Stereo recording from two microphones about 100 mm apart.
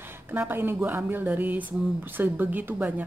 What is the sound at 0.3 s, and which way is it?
Speech, 20° right (ahead or behind).